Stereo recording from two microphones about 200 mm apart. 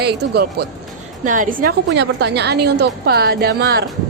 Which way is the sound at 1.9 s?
60° right (ahead or behind).